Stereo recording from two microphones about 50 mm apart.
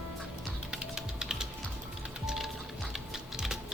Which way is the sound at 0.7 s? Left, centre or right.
Centre.